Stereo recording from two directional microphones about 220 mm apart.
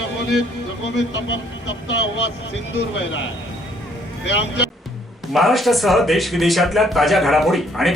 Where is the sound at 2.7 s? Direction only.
60° left (ahead or behind).